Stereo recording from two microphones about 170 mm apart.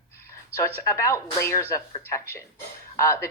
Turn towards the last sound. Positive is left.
turn(degrees=15)  # may be behind; listen again after turning